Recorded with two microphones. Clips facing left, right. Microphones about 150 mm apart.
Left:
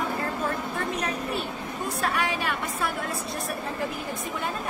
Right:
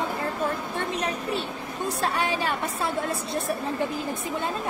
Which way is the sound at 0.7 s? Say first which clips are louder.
Right 1 dB; 30° right (ahead or behind).